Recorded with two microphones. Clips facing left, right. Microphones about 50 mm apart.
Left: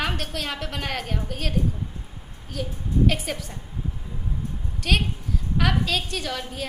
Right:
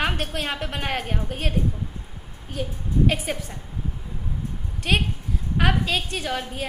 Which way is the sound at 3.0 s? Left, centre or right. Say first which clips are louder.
Even; centre.